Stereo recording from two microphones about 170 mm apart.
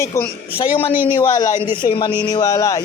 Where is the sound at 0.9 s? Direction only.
10° right (ahead or behind).